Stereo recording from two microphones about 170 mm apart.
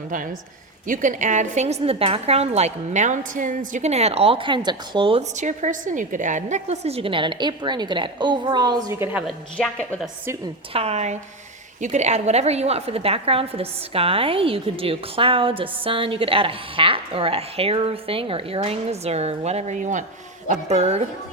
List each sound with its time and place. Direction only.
0.9 s a woman's voice: 50° right (ahead or behind); by 5.2 s 30° right (ahead or behind)
5.4 s a woman's voice: 45° right (ahead or behind); by 9.3 s 10° right (ahead or behind)
9.6 s a woman's voice: 10° left (ahead or behind)
10.7 s a woman's voice: 35° right (ahead or behind)